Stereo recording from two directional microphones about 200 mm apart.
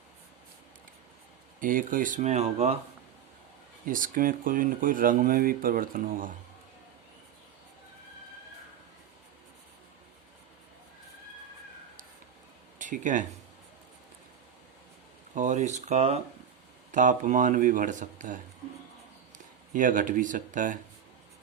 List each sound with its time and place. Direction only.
1.6 s speech: 45° right (ahead or behind)
3.8 s speech: 40° right (ahead or behind)
12.8 s speech: 40° right (ahead or behind)
15.4 s speech: 35° right (ahead or behind)
19.7 s speech: 40° right (ahead or behind)